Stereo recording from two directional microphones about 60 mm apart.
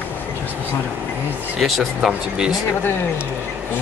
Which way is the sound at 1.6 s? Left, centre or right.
Centre.